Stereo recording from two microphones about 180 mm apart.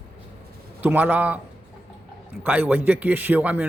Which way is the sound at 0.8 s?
10° right (ahead or behind).